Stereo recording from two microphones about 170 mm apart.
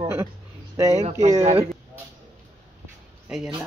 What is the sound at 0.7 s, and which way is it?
Speech, 20° right (ahead or behind).